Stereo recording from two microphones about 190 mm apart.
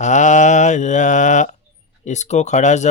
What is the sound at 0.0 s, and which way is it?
A man's voice, 40° left (ahead or behind).